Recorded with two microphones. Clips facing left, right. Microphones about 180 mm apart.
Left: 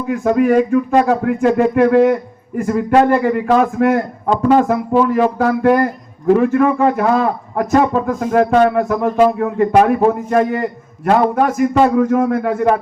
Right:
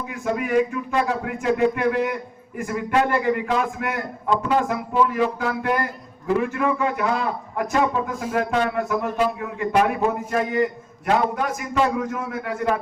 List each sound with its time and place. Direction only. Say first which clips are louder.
0.1 s a man's voice: left 10 dB; 50° left (ahead or behind)